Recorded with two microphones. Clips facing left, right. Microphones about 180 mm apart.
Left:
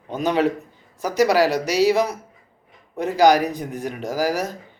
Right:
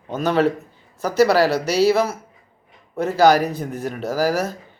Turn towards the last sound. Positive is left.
turn(degrees=15)  # may be behind; listen again after turning